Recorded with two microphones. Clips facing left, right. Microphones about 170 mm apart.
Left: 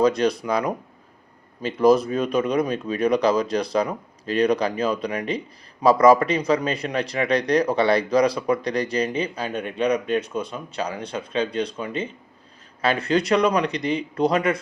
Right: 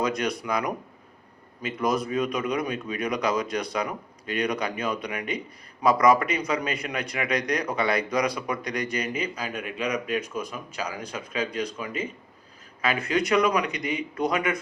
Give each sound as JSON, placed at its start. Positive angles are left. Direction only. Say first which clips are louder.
{"t": 0.0, "sound": "a man's voice", "louder": "left 7 dB", "side_deg": 30}